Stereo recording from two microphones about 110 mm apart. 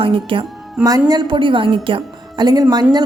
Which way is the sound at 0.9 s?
35° right (ahead or behind).